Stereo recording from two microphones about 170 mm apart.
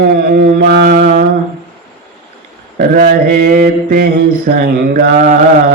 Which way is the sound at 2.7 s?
55° right (ahead or behind).